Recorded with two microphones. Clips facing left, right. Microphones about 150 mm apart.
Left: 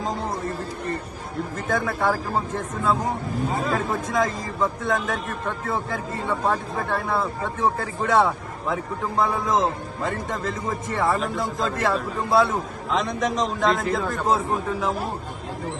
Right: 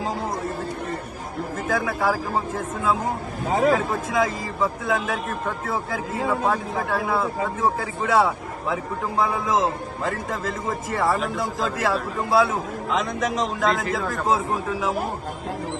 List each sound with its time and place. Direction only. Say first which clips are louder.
1.6 s a man's voice: even; centre (ahead or behind)
3.5 s speech: right 8 dB; 90° right
3.8 s a man's voice: right 1 dB; centre (ahead or behind)